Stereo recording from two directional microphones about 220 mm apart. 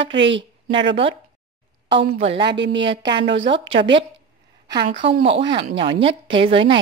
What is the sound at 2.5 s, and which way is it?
Speech, 55° right (ahead or behind).